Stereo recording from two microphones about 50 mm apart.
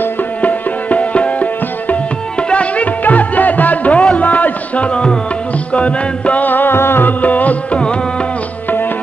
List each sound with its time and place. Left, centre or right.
0.4 s music: left
6.4 s music: left
8.6 s tabla: left